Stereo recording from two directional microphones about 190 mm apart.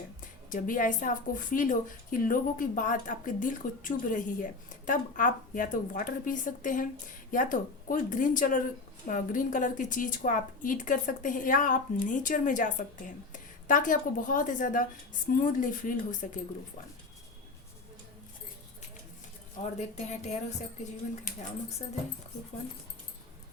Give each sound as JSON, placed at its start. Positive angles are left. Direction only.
{"t": 0.2, "sound": "a woman's voice", "side_deg": 45}
{"t": 19.5, "sound": "a woman's voice", "side_deg": 35}